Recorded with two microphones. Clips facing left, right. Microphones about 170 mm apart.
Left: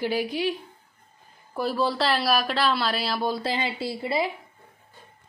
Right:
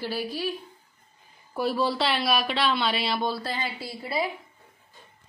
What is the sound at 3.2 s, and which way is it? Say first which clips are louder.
A woman's voice: left 3 dB; 20° left (ahead or behind).